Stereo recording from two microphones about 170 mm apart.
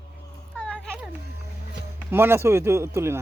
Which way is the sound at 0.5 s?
5° left (ahead or behind).